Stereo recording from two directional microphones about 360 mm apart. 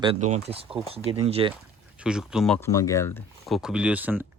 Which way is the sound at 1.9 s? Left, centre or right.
Centre.